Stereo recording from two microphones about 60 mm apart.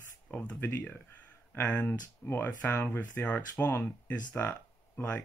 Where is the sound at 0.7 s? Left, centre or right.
Left.